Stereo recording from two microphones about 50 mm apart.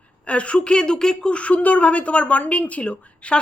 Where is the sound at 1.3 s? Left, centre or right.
Left.